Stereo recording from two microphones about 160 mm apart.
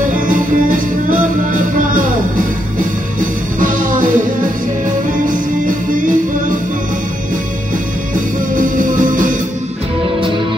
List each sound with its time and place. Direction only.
0.3 s music: 60° right (ahead or behind)
3.2 s music: 60° right (ahead or behind)
8.5 s music: 60° right (ahead or behind)